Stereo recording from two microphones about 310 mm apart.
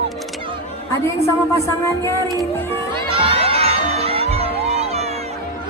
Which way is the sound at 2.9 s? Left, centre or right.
Centre.